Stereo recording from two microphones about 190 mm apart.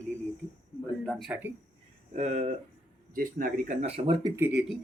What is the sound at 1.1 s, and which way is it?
Speech, centre (ahead or behind).